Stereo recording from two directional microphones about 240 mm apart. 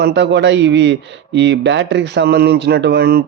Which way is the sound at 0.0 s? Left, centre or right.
Right.